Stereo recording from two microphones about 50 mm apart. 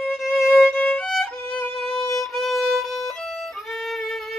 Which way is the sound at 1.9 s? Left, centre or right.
Centre.